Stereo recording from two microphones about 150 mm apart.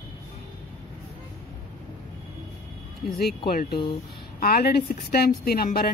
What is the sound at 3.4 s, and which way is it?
Speech, 90° left.